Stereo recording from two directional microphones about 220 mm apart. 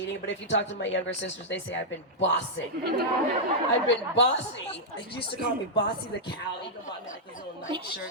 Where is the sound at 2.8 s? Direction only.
45° right (ahead or behind).